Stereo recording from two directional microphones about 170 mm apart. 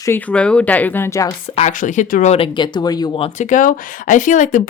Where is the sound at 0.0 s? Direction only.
10° left (ahead or behind).